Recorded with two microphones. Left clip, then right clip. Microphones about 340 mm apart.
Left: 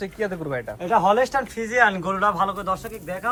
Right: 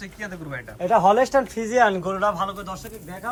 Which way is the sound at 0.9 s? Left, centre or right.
Right.